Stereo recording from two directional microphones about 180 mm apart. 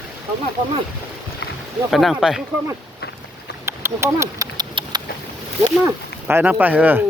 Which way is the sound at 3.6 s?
15° right (ahead or behind).